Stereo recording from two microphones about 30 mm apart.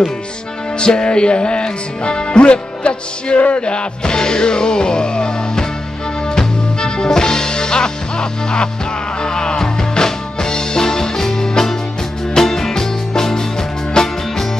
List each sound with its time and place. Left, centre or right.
0.7 s music: left
3.3 s music: left
3.6 s music: left